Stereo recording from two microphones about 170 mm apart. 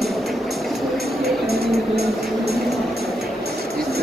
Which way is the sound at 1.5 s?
70° right (ahead or behind).